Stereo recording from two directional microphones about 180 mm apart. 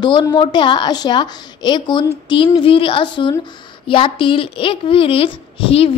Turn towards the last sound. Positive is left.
turn(degrees=30)  # may be behind; listen again after turning